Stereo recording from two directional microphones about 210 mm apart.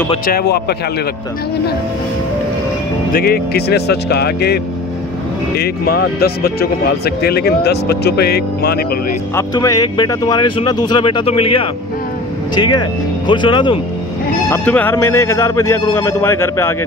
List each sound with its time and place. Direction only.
0.3 s speech: 50° left (ahead or behind)
3.1 s speech: 45° left (ahead or behind)
5.6 s speech: 50° left (ahead or behind)
9.3 s speech: 15° left (ahead or behind)
14.5 s speech: 10° left (ahead or behind)